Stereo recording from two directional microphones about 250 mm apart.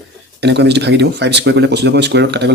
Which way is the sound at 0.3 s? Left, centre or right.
Right.